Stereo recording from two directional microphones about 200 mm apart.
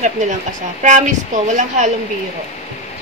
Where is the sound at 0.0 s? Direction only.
40° right (ahead or behind).